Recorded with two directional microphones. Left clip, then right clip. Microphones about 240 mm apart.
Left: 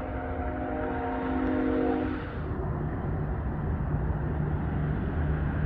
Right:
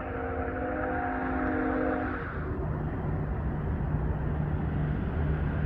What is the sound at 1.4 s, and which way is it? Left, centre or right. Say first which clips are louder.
Vehicle: left 2 dB; left.